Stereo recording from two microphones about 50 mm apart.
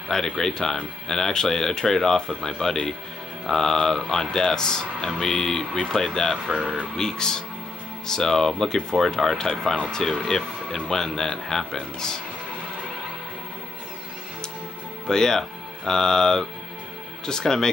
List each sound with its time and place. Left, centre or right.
0.1 s speech: centre
6.4 s speech: centre
7.0 s speech: centre
15.0 s speech: centre